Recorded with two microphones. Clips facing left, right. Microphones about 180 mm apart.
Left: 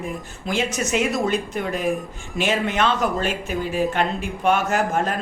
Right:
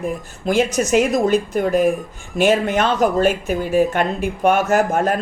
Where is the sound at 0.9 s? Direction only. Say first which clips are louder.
Right 5 dB; 45° right (ahead or behind).